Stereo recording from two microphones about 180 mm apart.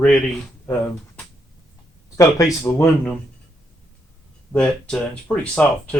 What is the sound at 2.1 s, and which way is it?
Speech, 15° left (ahead or behind).